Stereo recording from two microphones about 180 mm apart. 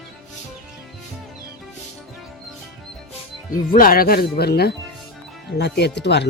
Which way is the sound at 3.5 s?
50° left (ahead or behind).